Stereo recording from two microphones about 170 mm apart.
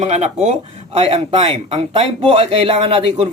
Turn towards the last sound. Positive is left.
turn(degrees=-35)  # may be behind; listen again after turning